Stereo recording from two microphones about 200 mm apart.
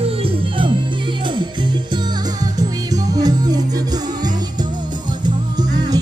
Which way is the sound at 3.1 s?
20° right (ahead or behind).